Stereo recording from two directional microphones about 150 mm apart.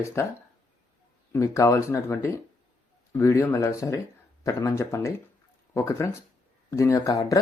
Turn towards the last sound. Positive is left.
turn(degrees=20)  # may be behind; listen again after turning